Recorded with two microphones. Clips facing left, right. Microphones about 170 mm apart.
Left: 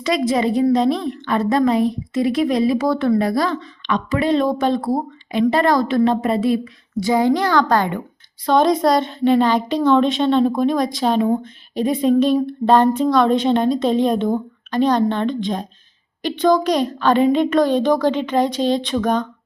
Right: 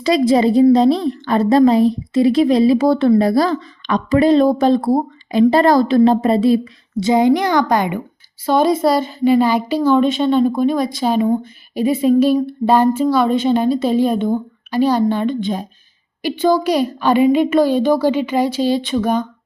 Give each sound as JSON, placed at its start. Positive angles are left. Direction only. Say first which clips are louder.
{"t": 0.0, "sound": "a woman's voice", "louder": "right 5 dB", "side_deg": -35}